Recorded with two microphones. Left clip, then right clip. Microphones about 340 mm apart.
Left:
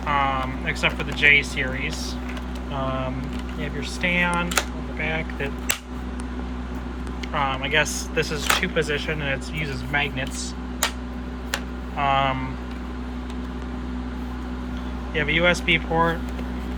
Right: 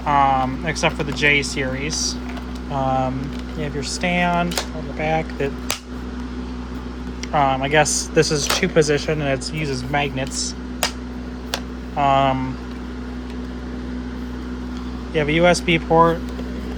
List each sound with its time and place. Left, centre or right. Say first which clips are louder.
0.0 s speech: right 6 dB; centre
7.3 s speech: right 6 dB; centre
11.9 s speech: right 5 dB; centre
15.1 s speech: right 4 dB; centre